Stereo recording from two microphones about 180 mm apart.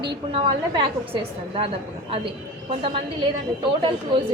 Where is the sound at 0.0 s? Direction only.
25° right (ahead or behind).